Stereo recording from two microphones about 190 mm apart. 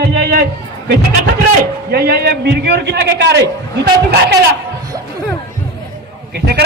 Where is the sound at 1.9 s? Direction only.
55° right (ahead or behind).